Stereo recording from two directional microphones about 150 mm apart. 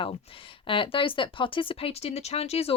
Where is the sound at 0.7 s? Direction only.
35° left (ahead or behind).